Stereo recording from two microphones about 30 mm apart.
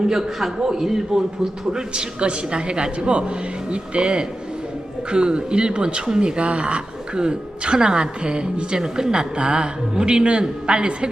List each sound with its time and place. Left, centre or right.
0.1 s a man's voice: centre
1.7 s speech: right